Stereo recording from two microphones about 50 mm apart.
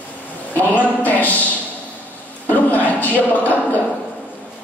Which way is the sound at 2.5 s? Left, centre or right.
Left.